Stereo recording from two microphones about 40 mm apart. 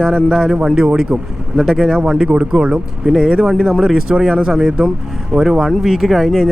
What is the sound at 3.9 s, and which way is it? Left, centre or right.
Speech, centre.